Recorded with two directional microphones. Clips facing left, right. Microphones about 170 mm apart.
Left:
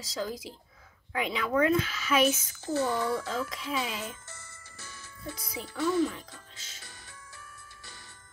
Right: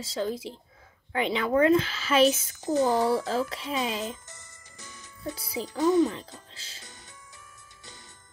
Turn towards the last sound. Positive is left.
turn(degrees=-20)  # may be behind; listen again after turning